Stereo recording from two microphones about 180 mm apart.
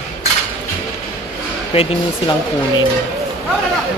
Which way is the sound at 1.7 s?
35° left (ahead or behind).